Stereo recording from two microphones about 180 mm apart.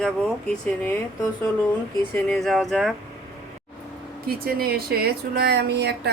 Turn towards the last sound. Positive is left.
turn(degrees=-70)  # may be behind; listen again after turning